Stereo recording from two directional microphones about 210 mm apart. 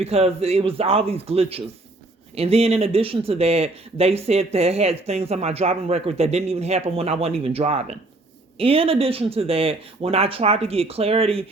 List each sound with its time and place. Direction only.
0.0 s speech: 30° right (ahead or behind)